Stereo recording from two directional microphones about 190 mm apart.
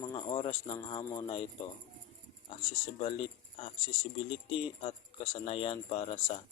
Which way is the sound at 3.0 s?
30° left (ahead or behind).